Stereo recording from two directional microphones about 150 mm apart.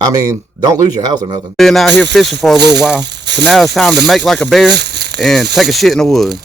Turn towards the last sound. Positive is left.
turn(degrees=5)  # may be behind; listen again after turning